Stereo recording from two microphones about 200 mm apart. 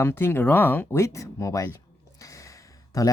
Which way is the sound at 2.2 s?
15° left (ahead or behind).